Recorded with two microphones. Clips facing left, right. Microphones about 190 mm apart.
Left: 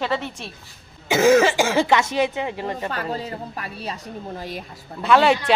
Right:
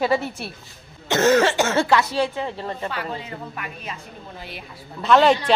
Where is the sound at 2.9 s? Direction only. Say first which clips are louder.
Left 3 dB; 40° left (ahead or behind).